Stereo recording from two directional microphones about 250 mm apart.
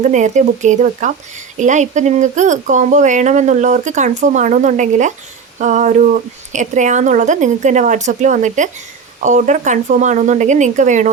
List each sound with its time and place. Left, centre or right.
0.0 s speech: right